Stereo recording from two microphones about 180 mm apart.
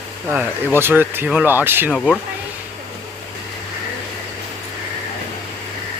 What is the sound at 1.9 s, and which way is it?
Speech, 5° left (ahead or behind).